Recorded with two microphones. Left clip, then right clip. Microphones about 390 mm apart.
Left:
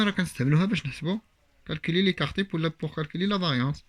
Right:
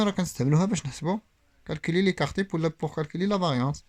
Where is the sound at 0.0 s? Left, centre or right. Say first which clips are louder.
Even; centre.